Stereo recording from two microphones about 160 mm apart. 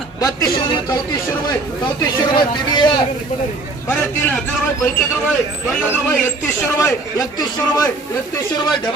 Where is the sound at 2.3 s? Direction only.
30° left (ahead or behind).